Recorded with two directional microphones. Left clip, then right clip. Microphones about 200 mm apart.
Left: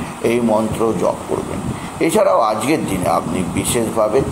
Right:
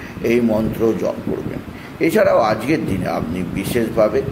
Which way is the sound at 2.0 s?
15° right (ahead or behind).